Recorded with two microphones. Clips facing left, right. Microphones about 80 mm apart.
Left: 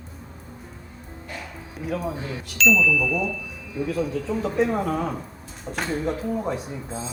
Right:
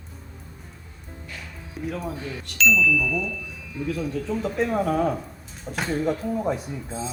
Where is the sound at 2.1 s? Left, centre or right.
Left.